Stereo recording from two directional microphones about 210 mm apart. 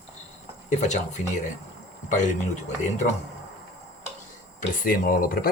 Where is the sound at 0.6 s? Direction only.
35° left (ahead or behind).